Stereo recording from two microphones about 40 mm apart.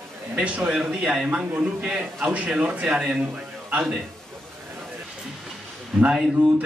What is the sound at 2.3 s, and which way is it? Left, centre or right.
Speech, right.